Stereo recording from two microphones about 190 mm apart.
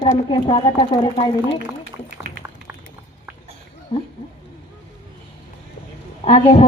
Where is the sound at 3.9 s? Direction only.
25° left (ahead or behind).